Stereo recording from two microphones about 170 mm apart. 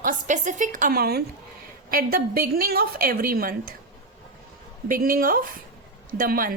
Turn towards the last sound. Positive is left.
turn(degrees=-55)  # may be behind; listen again after turning